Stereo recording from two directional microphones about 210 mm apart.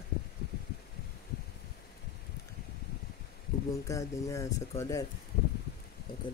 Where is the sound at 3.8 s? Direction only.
15° left (ahead or behind).